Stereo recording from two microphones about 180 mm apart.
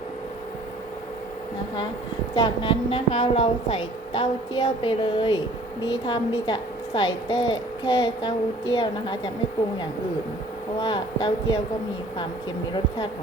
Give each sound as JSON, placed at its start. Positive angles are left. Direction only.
{"t": 2.3, "sound": "a woman's voice", "side_deg": 25}
{"t": 10.8, "sound": "a woman's voice", "side_deg": 25}